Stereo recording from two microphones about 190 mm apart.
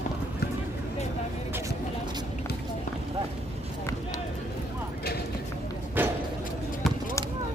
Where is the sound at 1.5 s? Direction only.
15° right (ahead or behind).